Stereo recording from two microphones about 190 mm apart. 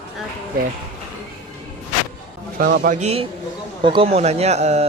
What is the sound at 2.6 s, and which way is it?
Speech, 50° right (ahead or behind).